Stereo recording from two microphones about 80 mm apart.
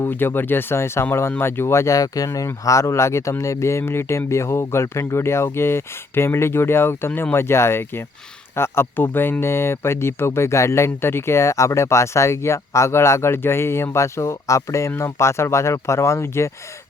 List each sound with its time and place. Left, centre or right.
0.0 s speech: left